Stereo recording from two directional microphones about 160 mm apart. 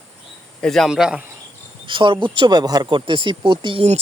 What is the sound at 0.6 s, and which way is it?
Speech, centre (ahead or behind).